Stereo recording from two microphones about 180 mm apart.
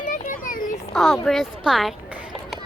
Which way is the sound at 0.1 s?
45° left (ahead or behind).